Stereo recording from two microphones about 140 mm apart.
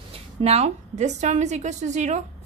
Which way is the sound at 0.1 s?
50° right (ahead or behind).